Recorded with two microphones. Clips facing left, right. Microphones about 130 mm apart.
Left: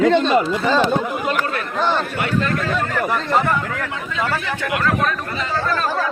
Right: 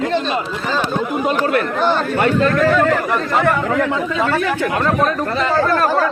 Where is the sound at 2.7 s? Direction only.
80° right.